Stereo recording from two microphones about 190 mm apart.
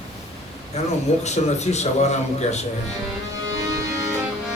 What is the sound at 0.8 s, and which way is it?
A man's voice, 35° left (ahead or behind).